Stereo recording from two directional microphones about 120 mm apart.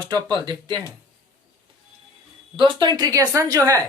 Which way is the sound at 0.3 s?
40° right (ahead or behind).